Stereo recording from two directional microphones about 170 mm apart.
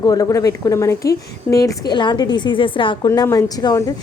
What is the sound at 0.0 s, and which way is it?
A woman's voice, 20° left (ahead or behind).